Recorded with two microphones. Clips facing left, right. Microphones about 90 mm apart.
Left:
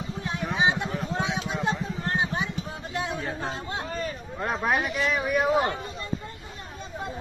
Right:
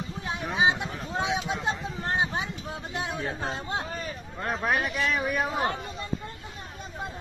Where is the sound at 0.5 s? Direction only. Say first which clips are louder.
Even; 25° right (ahead or behind).